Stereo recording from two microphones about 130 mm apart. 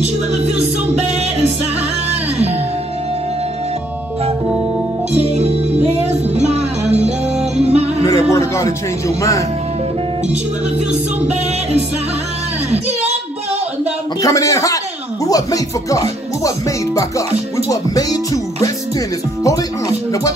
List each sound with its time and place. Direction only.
0.9 s music: 55° right (ahead or behind)
5.2 s music: 55° right (ahead or behind)
8.3 s music: 20° left (ahead or behind)
14.2 s music: 25° left (ahead or behind)